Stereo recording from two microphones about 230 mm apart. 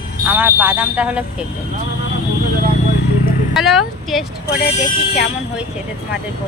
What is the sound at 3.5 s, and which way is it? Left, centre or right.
Speech, centre.